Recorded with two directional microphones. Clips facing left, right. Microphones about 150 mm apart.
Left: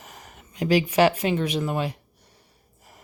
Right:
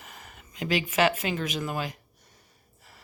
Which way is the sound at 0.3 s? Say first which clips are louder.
Left 7 dB; 35° left (ahead or behind).